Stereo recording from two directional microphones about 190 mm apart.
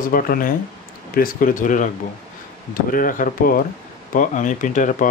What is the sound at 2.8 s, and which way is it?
Speech, 45° left (ahead or behind).